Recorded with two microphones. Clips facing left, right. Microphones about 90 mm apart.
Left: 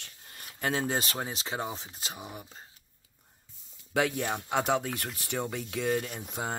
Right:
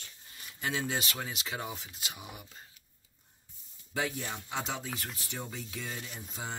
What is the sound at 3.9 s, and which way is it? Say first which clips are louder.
Speech: left 6 dB; 65° left (ahead or behind).